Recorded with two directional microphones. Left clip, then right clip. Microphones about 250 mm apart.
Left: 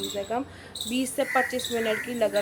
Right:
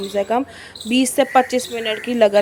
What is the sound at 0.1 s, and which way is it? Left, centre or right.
Speech, right.